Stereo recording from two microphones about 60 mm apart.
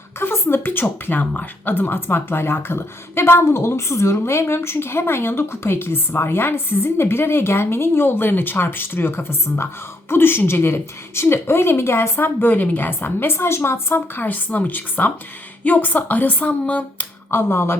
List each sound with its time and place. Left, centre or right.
0.2 s speech: left
17.3 s speech: left